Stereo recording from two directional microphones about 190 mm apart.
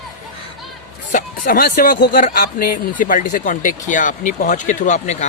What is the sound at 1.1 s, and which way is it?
Speech, 45° left (ahead or behind).